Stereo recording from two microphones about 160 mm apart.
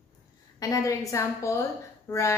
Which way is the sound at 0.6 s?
20° left (ahead or behind).